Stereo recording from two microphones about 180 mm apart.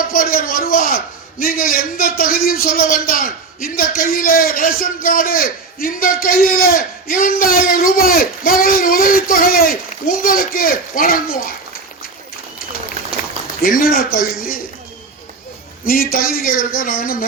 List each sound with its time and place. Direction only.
0.1 s a man's voice: 55° left (ahead or behind)
13.6 s a man's voice: 50° left (ahead or behind)
15.9 s a man's voice: 55° left (ahead or behind)